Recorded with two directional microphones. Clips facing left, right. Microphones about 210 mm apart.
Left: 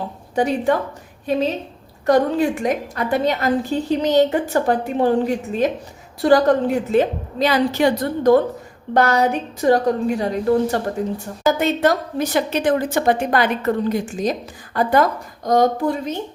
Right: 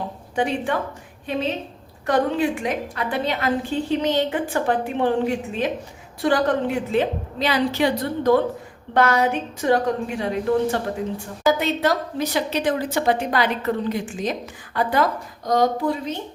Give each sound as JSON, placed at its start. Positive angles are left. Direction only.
{"t": 0.3, "sound": "a woman's voice", "side_deg": 40}